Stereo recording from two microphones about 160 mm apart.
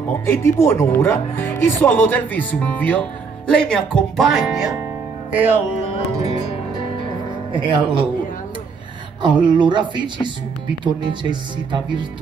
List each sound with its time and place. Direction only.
0.3 s speech: 15° left (ahead or behind); by 4.7 s centre (ahead or behind)
5.3 s music: 10° right (ahead or behind)
7.5 s speech: 30° right (ahead or behind)
9.5 s speech: 30° right (ahead or behind)